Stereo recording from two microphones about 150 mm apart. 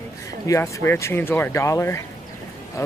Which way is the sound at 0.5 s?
20° left (ahead or behind).